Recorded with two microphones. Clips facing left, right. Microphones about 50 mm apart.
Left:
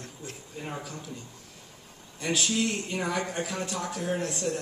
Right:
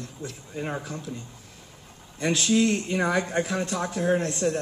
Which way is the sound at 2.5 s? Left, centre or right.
Right.